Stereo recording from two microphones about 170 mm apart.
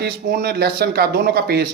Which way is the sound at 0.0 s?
65° right (ahead or behind).